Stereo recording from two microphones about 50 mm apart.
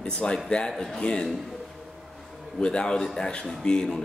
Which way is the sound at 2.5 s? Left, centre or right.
Centre.